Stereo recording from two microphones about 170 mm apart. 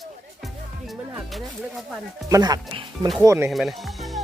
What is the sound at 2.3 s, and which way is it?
Speech, 20° right (ahead or behind).